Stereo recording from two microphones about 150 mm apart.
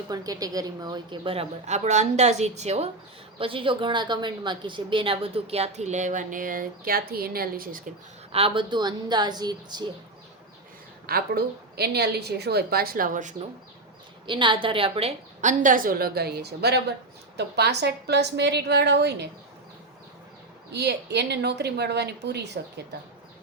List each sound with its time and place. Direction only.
0.1 s a woman's voice: 25° right (ahead or behind); by 7.8 s 75° right (ahead or behind)
8.3 s a woman's voice: 40° right (ahead or behind)
11.0 s a woman's voice: 90° right; by 13.3 s 65° right (ahead or behind)
14.3 s a woman's voice: 35° right (ahead or behind)
15.4 s a woman's voice: 55° right (ahead or behind); by 19.1 s 90° right
20.7 s a woman's voice: 90° right